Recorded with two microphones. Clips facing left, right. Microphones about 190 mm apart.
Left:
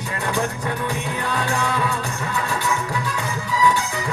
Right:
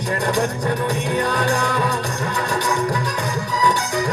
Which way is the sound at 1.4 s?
40° right (ahead or behind).